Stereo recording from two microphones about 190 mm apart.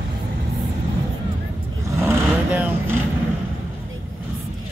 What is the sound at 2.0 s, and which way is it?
Vehicle, 10° right (ahead or behind).